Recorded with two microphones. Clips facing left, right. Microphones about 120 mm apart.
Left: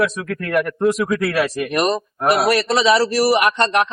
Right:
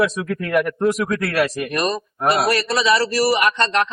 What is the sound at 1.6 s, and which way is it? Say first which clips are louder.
A man's voice: left 3 dB; 20° left (ahead or behind).